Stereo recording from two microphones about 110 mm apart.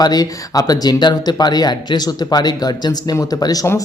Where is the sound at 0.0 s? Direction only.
35° left (ahead or behind).